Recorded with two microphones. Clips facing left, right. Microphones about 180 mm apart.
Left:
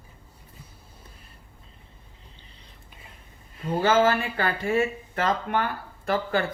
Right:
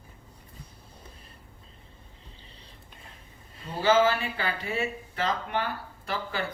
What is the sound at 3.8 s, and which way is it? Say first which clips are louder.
Speech: left 1 dB; 50° left (ahead or behind).